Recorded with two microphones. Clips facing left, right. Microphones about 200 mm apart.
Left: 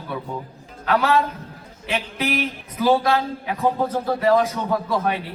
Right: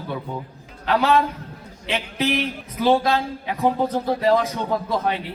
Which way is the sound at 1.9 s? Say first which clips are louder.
Right 1 dB; 25° right (ahead or behind).